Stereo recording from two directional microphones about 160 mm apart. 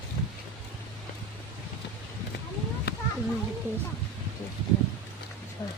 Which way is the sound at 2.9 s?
90° left.